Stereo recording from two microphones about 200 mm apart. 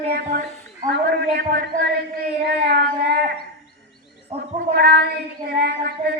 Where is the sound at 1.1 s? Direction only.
55° right (ahead or behind).